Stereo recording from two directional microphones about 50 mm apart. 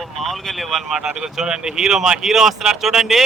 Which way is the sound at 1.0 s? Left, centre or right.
Centre.